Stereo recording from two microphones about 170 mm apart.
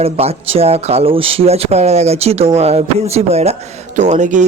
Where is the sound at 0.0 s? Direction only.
35° right (ahead or behind).